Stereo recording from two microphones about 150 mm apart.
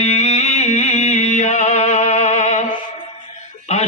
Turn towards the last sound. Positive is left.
turn(degrees=45)  # may be behind; listen again after turning